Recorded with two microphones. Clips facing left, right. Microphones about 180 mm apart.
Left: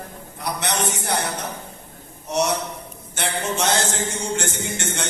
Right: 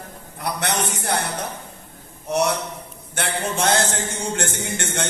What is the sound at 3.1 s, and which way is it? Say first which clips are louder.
A man's voice: even; 55° right (ahead or behind).